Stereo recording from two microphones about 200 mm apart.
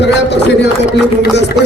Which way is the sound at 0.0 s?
60° left (ahead or behind).